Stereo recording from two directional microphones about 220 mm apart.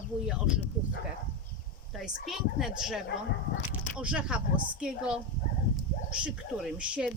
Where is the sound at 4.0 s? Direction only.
5° right (ahead or behind).